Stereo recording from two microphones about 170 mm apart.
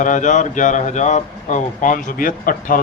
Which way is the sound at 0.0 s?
45° left (ahead or behind).